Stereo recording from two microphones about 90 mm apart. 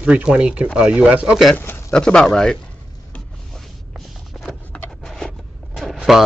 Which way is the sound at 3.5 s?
Centre (ahead or behind).